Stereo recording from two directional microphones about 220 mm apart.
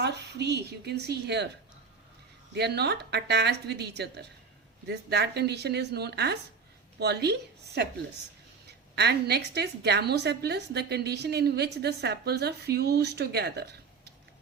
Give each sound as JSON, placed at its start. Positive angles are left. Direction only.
{"t": 0.0, "sound": "a woman's voice", "side_deg": -50}
{"t": 2.6, "sound": "a woman's voice", "side_deg": -50}